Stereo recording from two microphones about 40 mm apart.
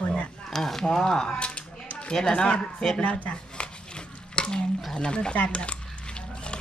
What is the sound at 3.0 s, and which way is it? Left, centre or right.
Speech, left.